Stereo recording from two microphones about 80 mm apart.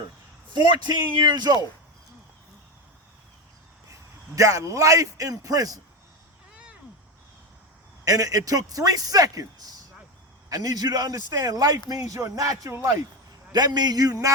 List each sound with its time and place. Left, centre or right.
0.5 s a man's voice: right
4.4 s a man's voice: right
6.5 s cat: centre
8.0 s a man's voice: right
13.5 s a man's voice: right